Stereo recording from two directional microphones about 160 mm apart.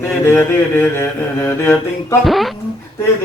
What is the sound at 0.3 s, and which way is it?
A man's voice, 15° left (ahead or behind).